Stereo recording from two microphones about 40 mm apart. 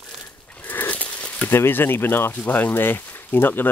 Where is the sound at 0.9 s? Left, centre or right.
Left.